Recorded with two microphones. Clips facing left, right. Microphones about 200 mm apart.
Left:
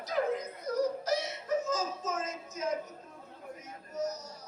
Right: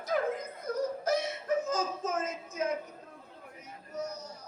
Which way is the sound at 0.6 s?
55° right (ahead or behind).